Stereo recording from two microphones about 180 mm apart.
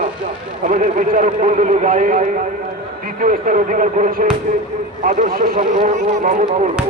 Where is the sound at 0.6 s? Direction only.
45° right (ahead or behind).